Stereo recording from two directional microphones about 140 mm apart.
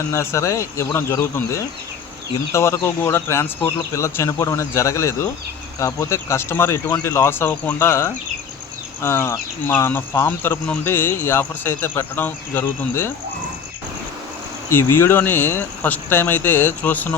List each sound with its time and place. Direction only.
0.1 s speech: 20° left (ahead or behind)
14.7 s speech: 20° left (ahead or behind)